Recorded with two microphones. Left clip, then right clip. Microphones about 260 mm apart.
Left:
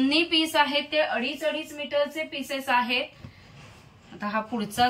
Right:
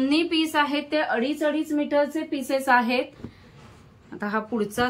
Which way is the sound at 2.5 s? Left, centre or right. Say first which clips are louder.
Right 4 dB; right.